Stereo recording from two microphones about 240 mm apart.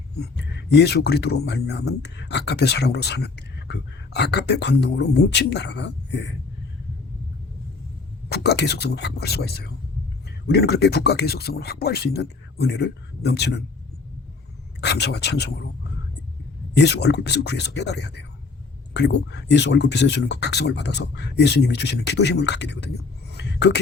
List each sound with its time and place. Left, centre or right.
0.2 s speech: left
8.3 s speech: left
14.8 s speech: left
16.7 s speech: left
23.3 s a sound: left